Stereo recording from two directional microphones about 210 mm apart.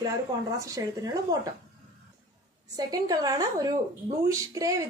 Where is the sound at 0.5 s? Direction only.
15° right (ahead or behind).